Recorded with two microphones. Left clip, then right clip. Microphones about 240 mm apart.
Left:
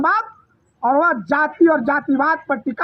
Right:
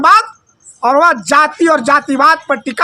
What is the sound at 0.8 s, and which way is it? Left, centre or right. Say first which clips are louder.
Speech: right 6 dB; right.